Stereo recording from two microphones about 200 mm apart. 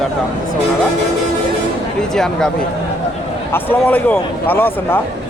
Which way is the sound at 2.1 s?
5° left (ahead or behind).